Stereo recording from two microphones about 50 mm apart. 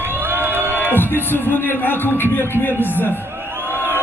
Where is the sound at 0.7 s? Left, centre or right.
Left.